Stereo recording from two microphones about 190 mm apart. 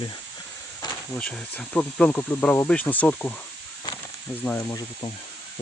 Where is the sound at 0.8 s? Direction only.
20° left (ahead or behind).